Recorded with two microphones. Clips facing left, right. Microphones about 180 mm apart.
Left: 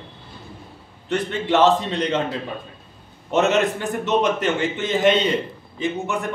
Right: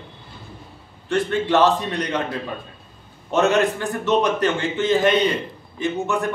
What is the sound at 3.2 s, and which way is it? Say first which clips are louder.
A man's voice: right 1 dB; 20° left (ahead or behind).